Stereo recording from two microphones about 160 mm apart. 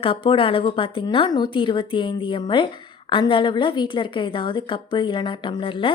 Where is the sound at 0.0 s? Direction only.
35° left (ahead or behind).